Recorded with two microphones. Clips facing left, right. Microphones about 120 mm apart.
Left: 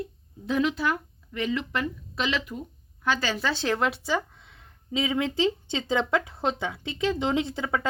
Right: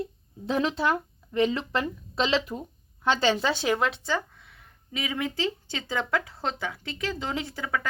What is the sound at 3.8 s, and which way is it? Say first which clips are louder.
Speech: left 1 dB; 5° left (ahead or behind).